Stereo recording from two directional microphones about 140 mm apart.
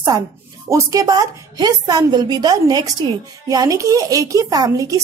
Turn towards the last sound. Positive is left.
turn(degrees=-25)  # may be behind; listen again after turning